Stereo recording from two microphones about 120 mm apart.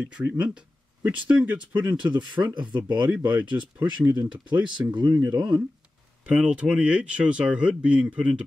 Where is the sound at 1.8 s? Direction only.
40° right (ahead or behind).